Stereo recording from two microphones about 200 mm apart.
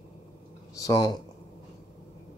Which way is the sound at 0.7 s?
20° left (ahead or behind).